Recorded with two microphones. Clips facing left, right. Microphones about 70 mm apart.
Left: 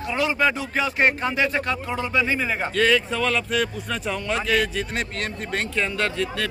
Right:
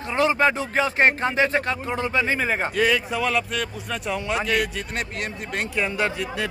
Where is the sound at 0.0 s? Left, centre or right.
Right.